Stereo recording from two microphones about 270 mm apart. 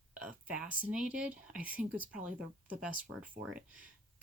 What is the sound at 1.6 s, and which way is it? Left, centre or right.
Speech, centre.